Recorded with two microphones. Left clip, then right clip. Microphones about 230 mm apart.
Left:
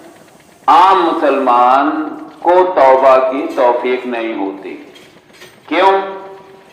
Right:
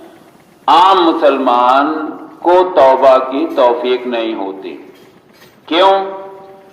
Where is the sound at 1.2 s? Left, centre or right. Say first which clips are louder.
Even; right.